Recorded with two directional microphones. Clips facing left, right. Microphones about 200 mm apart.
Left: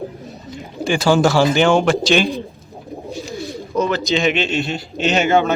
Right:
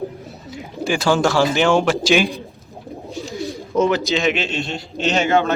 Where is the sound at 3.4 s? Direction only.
15° right (ahead or behind).